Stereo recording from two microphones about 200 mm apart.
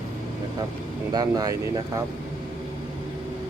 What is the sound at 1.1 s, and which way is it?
Speech, 20° right (ahead or behind).